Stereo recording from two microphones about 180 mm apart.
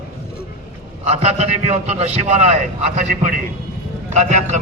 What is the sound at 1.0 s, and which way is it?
A man's voice, 35° right (ahead or behind).